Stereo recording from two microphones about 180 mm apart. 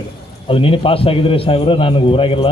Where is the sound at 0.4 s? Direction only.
30° left (ahead or behind).